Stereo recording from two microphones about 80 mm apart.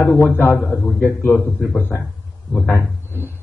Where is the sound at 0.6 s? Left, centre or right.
Centre.